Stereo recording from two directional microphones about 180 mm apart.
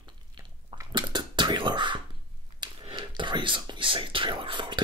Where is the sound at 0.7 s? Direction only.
25° right (ahead or behind).